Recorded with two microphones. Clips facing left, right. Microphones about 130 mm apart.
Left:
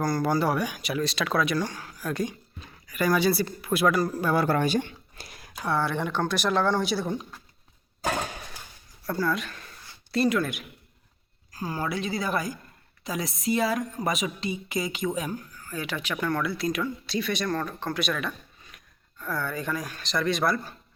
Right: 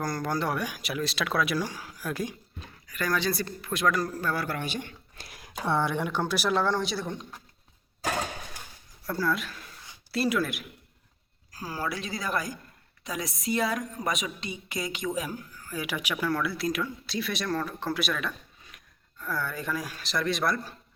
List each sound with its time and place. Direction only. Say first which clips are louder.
0.0 s speech: left 5 dB; 5° left (ahead or behind)
2.8 s speech: left 5 dB; 10° left (ahead or behind)
4.4 s speech: left 9 dB; 40° left (ahead or behind)
5.1 s a sound: left 2 dB; centre (ahead or behind)
5.5 s speech: even; 25° right (ahead or behind); by 7.3 s 5° left (ahead or behind)
9.0 s speech: left 1 dB; centre (ahead or behind)